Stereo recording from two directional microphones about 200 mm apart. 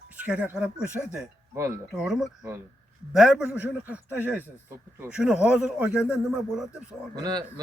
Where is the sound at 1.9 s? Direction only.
Centre (ahead or behind).